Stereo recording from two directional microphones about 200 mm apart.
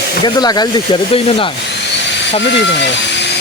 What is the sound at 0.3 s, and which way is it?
Speech, 20° left (ahead or behind).